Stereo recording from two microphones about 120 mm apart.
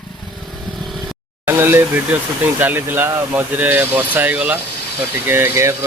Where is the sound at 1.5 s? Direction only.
20° right (ahead or behind).